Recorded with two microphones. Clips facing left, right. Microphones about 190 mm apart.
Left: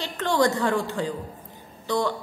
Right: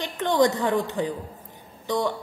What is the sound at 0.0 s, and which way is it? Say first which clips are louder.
A woman's voice: right 2 dB; 15° right (ahead or behind).